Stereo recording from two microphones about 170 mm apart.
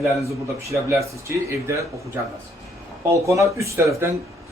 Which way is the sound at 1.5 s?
15° right (ahead or behind).